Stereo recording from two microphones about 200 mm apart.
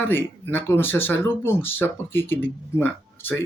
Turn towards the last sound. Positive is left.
turn(degrees=10)  # may be behind; listen again after turning